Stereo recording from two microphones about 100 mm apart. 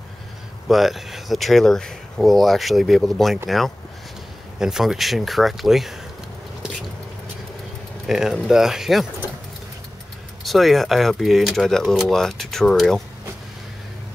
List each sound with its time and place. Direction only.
0.7 s speech: centre (ahead or behind)
8.1 s speech: 5° right (ahead or behind)
10.4 s speech: centre (ahead or behind)